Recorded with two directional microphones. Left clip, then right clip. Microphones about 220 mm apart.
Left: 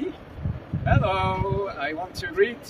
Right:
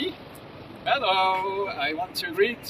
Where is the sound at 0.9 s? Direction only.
5° left (ahead or behind).